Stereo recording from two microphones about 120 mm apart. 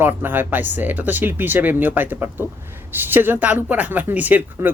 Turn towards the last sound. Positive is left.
turn(degrees=-15)  # may be behind; listen again after turning